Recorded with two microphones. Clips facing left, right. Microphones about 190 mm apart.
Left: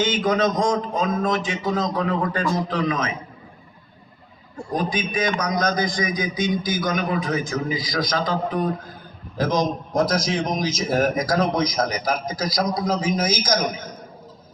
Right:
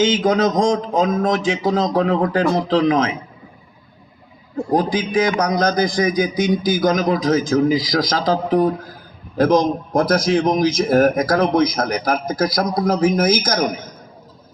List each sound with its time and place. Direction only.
0.3 s a man's voice: 80° right
4.7 s a man's voice: 75° right (ahead or behind)
9.4 s speech: 60° right (ahead or behind)